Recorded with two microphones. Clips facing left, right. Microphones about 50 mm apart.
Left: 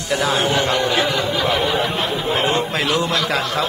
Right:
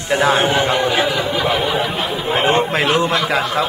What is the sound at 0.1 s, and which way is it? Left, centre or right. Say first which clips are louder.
Speech: right 4 dB; right.